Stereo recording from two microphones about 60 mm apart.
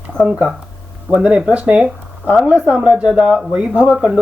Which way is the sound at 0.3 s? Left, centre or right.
Centre.